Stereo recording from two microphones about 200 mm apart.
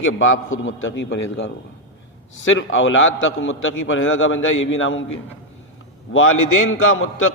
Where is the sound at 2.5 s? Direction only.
75° left (ahead or behind).